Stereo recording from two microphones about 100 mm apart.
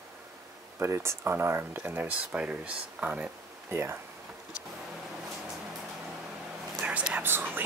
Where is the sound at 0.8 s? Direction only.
25° right (ahead or behind).